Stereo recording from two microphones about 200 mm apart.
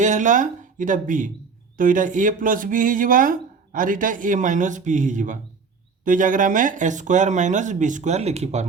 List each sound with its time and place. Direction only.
0.0 s speech: 40° right (ahead or behind)